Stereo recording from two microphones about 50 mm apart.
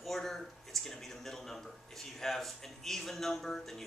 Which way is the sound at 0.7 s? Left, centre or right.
Centre.